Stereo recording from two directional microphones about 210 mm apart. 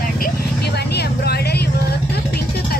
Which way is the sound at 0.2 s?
50° left (ahead or behind).